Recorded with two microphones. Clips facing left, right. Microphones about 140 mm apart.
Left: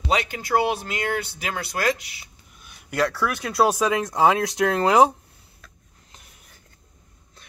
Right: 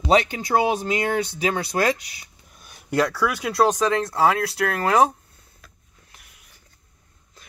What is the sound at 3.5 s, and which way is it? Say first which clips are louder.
Speech: even; 10° left (ahead or behind).